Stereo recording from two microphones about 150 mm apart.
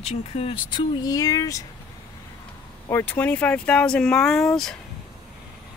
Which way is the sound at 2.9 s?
15° left (ahead or behind).